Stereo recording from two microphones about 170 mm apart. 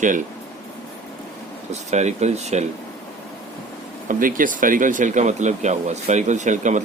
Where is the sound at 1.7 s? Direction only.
40° right (ahead or behind).